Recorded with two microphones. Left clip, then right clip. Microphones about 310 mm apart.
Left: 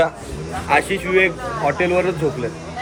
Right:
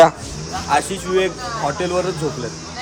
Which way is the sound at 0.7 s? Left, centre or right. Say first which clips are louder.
Left 2 dB; centre.